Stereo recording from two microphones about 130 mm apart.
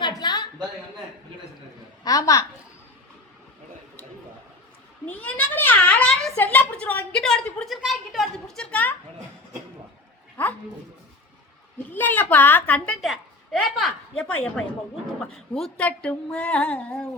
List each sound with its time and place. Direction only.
0.0 s a sound: 35° left (ahead or behind)
2.0 s a woman's voice: 25° left (ahead or behind)
5.0 s a child's voice: 10° left (ahead or behind)
10.4 s speech: 15° left (ahead or behind)
11.9 s a woman's voice: 15° left (ahead or behind)